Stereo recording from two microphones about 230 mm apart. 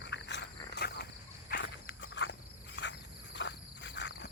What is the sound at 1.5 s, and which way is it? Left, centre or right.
Walk, left.